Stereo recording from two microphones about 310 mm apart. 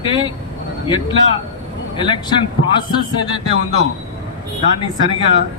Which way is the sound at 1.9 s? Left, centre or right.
Centre.